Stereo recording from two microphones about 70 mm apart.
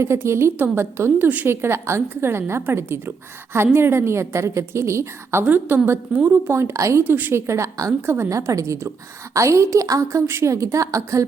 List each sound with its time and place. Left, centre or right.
0.0 s a woman's voice: right
5.5 s a woman's voice: right
7.0 s a woman's voice: right
7.4 s a woman's voice: right
10.2 s a woman's voice: right
10.5 s a woman's voice: right